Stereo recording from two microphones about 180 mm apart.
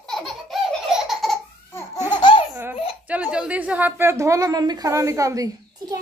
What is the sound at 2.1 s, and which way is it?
Laughter, 25° left (ahead or behind).